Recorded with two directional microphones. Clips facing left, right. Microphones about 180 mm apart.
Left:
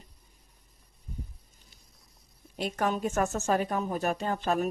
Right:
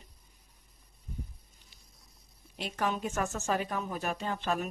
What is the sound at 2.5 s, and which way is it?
A woman's voice, 45° left (ahead or behind).